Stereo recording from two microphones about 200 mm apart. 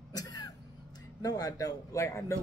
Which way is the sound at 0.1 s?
20° left (ahead or behind).